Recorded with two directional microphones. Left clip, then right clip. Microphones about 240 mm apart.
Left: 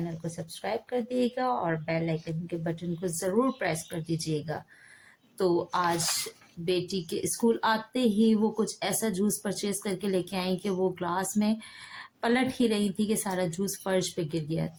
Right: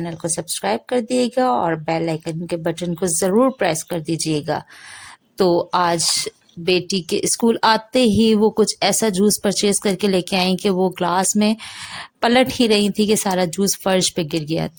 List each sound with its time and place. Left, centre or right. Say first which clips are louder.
0.0 s speech: right 12 dB; right